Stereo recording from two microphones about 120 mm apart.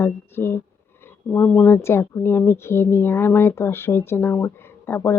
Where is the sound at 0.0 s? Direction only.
20° left (ahead or behind).